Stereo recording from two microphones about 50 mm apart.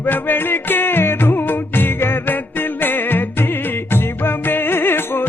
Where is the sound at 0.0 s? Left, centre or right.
Left.